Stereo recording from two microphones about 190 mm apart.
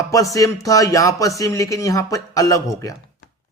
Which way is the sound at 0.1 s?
15° left (ahead or behind).